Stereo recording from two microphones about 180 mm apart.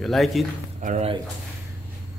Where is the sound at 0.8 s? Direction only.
45° right (ahead or behind).